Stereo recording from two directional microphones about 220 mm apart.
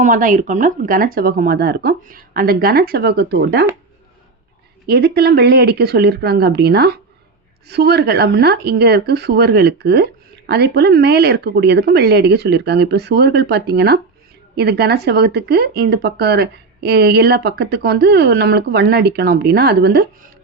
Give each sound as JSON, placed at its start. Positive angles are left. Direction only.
{"t": 0.0, "sound": "speech", "side_deg": -35}
{"t": 4.9, "sound": "speech", "side_deg": -50}